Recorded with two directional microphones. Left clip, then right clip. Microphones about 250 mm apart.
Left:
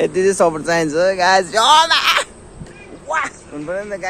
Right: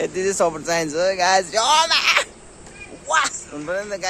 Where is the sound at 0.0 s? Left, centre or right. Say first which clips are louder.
Left 6 dB; centre.